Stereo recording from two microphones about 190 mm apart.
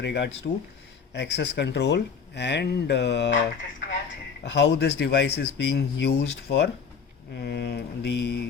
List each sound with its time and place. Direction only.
0.0 s speech: 65° left (ahead or behind)
4.4 s speech: 65° left (ahead or behind)